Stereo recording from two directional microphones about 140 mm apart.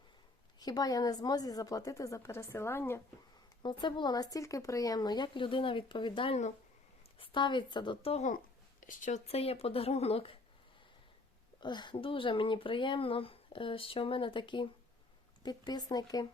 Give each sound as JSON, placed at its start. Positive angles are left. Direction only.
{"t": 0.6, "sound": "a woman's voice", "side_deg": 25}
{"t": 3.6, "sound": "speech", "side_deg": 35}
{"t": 8.8, "sound": "speech", "side_deg": 70}
{"t": 11.6, "sound": "a woman's voice", "side_deg": 35}